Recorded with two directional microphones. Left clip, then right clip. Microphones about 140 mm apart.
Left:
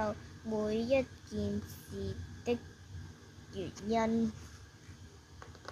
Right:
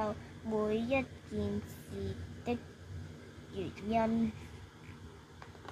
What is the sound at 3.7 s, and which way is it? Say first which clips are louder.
Speech: even; 40° left (ahead or behind).